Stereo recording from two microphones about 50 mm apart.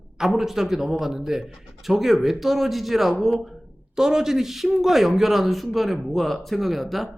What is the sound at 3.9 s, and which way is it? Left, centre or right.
A man's voice, centre.